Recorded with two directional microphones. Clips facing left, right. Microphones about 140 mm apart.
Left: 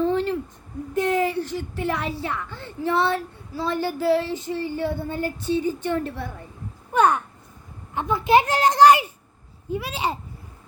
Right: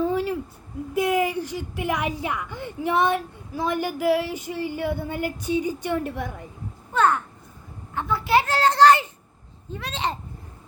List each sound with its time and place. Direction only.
0.0 s a sound: 10° right (ahead or behind)
0.9 s a woman's voice: 10° right (ahead or behind)
6.9 s a child's voice: 15° left (ahead or behind)